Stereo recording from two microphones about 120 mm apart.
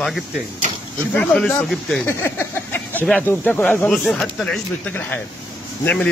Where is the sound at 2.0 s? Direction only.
20° left (ahead or behind).